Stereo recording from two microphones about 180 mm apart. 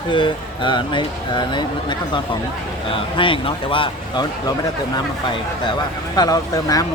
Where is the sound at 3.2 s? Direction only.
30° left (ahead or behind).